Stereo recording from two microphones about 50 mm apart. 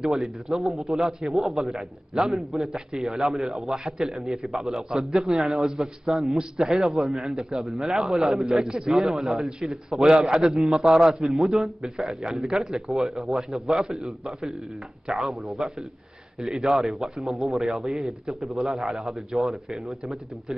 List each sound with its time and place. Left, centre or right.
0.0 s a man's voice: centre